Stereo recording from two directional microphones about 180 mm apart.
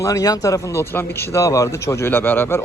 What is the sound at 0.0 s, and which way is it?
Speech, 20° left (ahead or behind).